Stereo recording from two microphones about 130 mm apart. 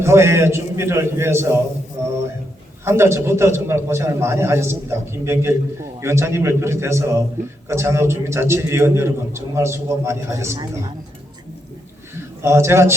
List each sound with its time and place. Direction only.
0.0 s a man's voice: 20° right (ahead or behind)
2.8 s a man's voice: 20° right (ahead or behind)
12.4 s a man's voice: 20° right (ahead or behind)